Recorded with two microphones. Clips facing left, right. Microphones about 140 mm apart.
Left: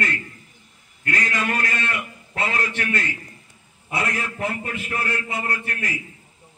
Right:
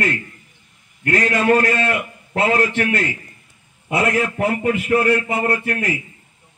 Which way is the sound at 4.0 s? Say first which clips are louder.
Right 8 dB; 70° right (ahead or behind).